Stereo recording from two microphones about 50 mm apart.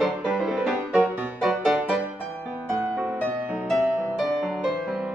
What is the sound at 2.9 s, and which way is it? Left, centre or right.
Music, right.